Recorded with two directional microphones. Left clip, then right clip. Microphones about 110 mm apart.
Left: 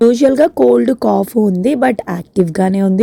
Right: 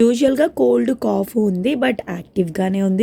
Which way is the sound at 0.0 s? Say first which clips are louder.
Left 5 dB; 30° left (ahead or behind).